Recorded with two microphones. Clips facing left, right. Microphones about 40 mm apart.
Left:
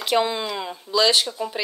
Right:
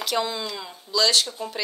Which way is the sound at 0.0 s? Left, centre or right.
Left.